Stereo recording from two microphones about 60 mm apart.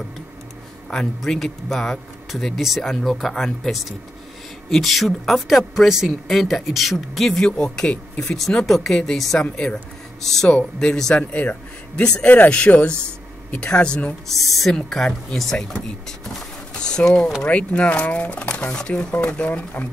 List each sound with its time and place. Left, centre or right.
0.8 s speech: centre
7.2 s speech: centre
8.4 s speech: centre
10.5 s speech: centre
12.3 s speech: left
12.5 s speech: centre
14.3 s speech: centre
16.9 s speech: centre